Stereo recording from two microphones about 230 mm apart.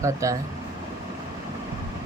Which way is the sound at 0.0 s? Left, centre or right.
Centre.